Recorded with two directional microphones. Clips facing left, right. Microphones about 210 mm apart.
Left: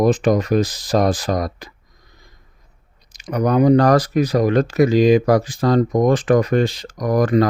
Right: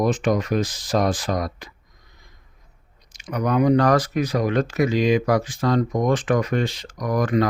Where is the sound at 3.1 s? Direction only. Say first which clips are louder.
Left 4 dB; 40° left (ahead or behind).